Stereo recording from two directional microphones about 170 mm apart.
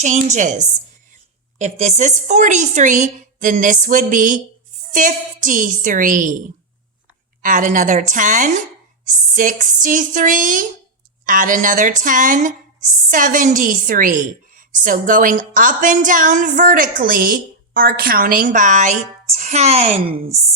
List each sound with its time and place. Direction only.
0.0 s a woman's voice: 45° right (ahead or behind)
7.4 s a woman's voice: 50° right (ahead or behind)